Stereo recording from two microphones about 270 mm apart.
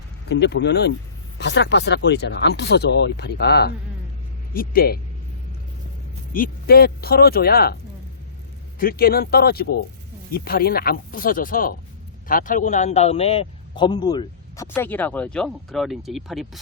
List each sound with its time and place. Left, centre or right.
0.3 s speech: left
6.3 s speech: left
8.8 s a man's voice: left; by 16.5 s centre